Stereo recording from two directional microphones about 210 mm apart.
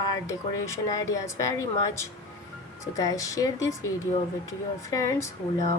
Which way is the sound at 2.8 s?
15° left (ahead or behind).